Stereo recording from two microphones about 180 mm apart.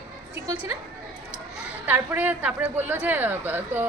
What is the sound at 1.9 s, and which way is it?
A woman's voice, 10° right (ahead or behind).